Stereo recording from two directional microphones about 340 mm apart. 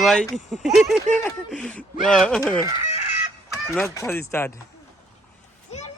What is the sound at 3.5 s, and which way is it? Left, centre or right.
Fowl, centre.